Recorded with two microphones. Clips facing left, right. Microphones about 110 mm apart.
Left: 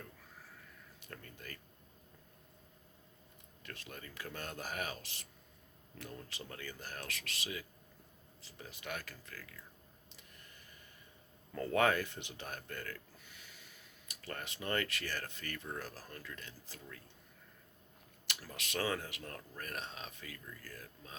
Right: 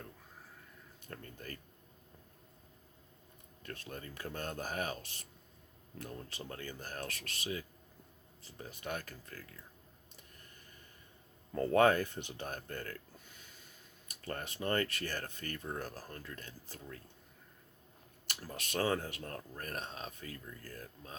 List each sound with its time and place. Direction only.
1.1 s speech: 35° right (ahead or behind)
3.6 s speech: 35° right (ahead or behind)
11.5 s speech: 35° right (ahead or behind)
18.7 s speech: 35° right (ahead or behind)